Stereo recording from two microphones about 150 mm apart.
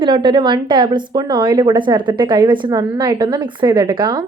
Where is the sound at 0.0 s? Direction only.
30° right (ahead or behind).